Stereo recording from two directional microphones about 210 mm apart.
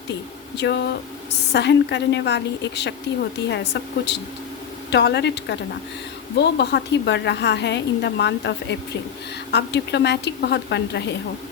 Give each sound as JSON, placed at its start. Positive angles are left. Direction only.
{"t": 0.5, "sound": "a woman's voice", "side_deg": 55}